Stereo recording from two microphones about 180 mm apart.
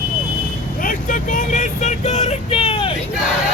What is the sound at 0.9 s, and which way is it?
Vehicle, 45° left (ahead or behind).